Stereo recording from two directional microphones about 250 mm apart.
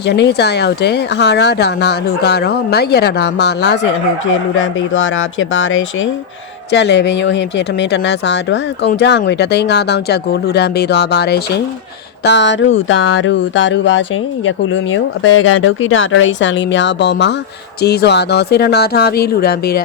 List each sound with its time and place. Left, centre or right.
0.0 s speech: left
4.3 s speech: left